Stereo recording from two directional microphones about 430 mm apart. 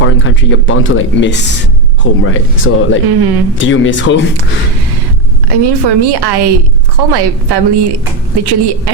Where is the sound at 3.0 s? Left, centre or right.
Right.